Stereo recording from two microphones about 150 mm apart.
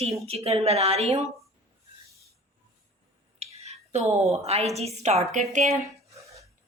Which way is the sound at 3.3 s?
45° right (ahead or behind).